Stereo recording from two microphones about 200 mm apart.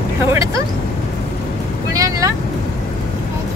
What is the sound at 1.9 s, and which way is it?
Speech, 15° right (ahead or behind).